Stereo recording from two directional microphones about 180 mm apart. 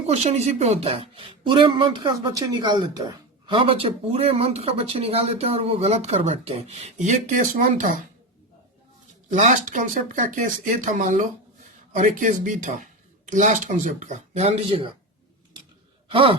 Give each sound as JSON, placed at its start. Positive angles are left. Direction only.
{"t": 0.1, "sound": "speech", "side_deg": -35}
{"t": 9.3, "sound": "speech", "side_deg": -45}
{"t": 16.0, "sound": "sigh", "side_deg": -30}